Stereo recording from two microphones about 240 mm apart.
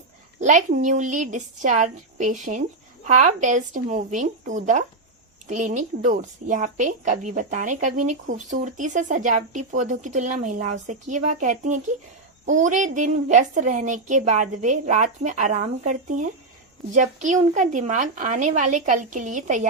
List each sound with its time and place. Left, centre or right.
0.3 s a woman's voice: right